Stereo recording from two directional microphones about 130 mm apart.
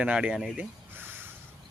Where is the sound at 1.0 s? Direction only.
15° right (ahead or behind).